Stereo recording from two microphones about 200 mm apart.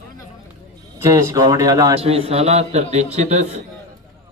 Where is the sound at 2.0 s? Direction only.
30° right (ahead or behind).